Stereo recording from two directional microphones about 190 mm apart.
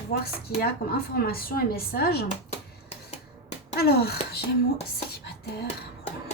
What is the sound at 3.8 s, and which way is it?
Speech, 55° left (ahead or behind).